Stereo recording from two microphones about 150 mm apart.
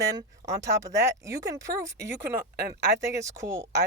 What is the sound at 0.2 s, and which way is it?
Speech, 25° right (ahead or behind).